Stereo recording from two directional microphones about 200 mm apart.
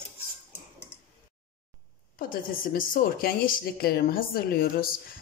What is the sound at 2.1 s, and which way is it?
A woman's voice, 45° left (ahead or behind).